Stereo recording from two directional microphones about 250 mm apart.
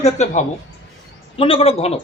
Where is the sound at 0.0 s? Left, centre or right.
Left.